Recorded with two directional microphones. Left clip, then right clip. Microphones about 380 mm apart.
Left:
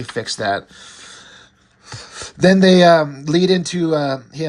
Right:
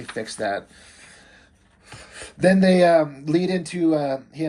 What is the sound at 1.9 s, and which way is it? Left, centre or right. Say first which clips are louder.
Speech: left 7 dB; centre.